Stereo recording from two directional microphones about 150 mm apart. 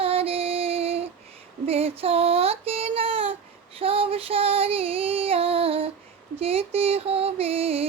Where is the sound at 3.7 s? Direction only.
40° right (ahead or behind).